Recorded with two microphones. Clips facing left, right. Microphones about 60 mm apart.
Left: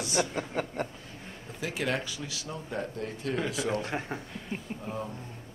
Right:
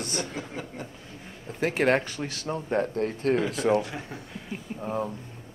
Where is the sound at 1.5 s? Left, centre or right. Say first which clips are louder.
Right 8 dB; right.